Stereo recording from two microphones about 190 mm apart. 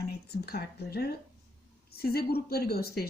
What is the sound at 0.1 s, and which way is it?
A woman's voice, 55° left (ahead or behind).